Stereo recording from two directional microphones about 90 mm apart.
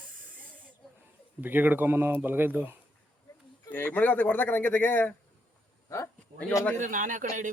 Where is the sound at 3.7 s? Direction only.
15° left (ahead or behind).